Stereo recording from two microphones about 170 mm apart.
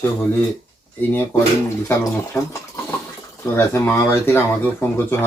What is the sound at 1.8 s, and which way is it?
Speech, 15° left (ahead or behind).